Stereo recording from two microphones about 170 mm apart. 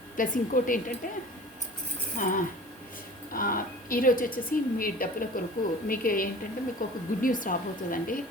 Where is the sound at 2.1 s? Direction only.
50° left (ahead or behind).